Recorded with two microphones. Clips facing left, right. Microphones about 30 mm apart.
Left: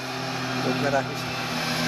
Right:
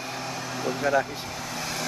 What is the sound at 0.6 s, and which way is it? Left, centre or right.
Speech, left.